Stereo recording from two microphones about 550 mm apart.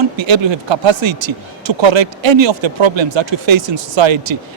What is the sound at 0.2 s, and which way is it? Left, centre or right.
Speech, right.